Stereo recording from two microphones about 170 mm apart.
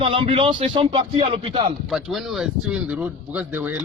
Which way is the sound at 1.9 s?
Centre (ahead or behind).